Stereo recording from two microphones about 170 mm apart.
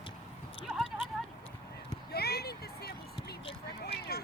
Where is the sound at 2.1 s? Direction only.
70° left (ahead or behind).